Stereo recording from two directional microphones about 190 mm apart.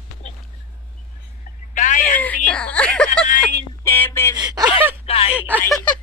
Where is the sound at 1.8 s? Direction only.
40° left (ahead or behind).